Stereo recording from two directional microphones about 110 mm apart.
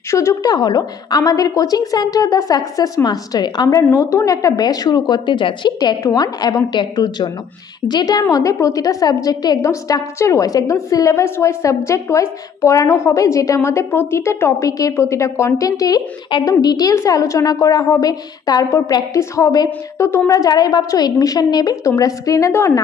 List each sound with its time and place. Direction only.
0.1 s a woman's voice: 25° left (ahead or behind)